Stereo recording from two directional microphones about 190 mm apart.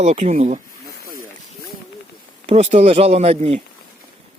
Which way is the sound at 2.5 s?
35° right (ahead or behind).